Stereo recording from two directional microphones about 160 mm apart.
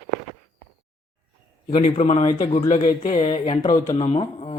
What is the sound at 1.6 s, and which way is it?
Speech, 35° left (ahead or behind).